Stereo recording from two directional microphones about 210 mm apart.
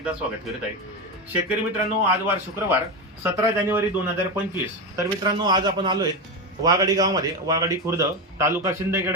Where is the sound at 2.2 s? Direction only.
10° right (ahead or behind).